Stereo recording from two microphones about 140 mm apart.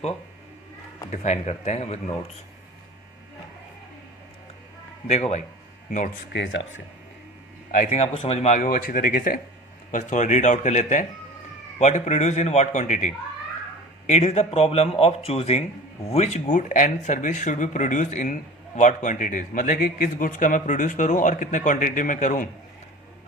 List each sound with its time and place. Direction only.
1.1 s a man's voice: 55° left (ahead or behind)
5.0 s speech: 50° left (ahead or behind)
7.7 s a man's voice: 60° left (ahead or behind); by 9.4 s 85° left
9.9 s a man's voice: 60° left (ahead or behind)
14.1 s a man's voice: 50° left (ahead or behind); by 22.4 s 65° left (ahead or behind)